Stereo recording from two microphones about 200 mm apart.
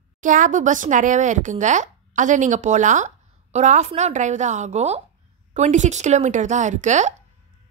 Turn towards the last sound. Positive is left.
turn(degrees=-35)  # may be behind; listen again after turning